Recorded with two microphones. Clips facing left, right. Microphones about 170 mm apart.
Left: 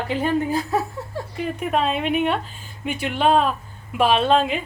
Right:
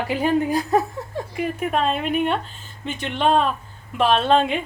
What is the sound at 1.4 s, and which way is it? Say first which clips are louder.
Speech: even; centre (ahead or behind).